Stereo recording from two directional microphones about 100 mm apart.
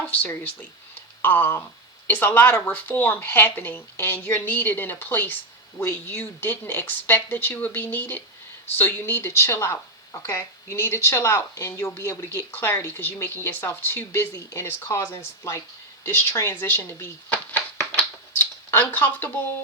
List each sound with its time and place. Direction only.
0.1 s speech: 20° left (ahead or behind)